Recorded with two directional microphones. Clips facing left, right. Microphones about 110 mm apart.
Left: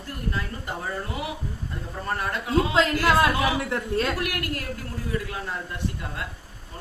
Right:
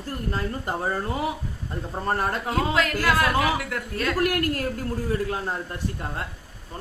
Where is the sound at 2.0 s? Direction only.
40° right (ahead or behind).